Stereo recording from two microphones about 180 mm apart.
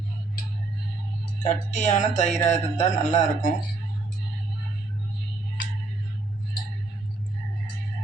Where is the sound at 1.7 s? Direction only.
45° left (ahead or behind).